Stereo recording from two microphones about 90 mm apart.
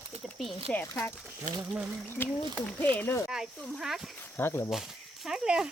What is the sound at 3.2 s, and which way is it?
Speech, 5° right (ahead or behind).